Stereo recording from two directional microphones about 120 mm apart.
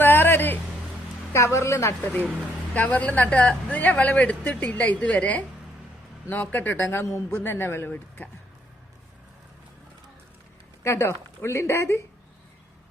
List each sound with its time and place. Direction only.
0.0 s a sound: 15° left (ahead or behind)
1.5 s speech: 25° left (ahead or behind)
2.7 s speech: 10° left (ahead or behind)
10.8 s speech: 20° left (ahead or behind)